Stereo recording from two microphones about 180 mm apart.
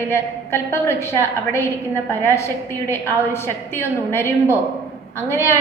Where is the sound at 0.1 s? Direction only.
15° left (ahead or behind).